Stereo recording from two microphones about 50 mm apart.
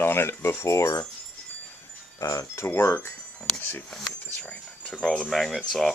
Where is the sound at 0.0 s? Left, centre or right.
Left.